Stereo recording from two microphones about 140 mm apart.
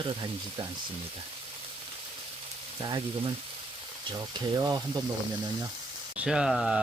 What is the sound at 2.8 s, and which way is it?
Speech, 30° right (ahead or behind).